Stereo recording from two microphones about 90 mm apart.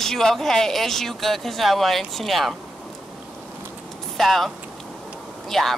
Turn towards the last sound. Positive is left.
turn(degrees=0)  # may be behind; listen again after turning